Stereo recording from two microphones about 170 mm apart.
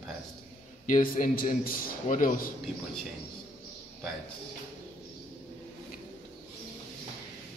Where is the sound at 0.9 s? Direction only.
50° left (ahead or behind).